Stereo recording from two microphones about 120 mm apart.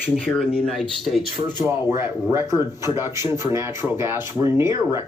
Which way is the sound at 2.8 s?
25° right (ahead or behind).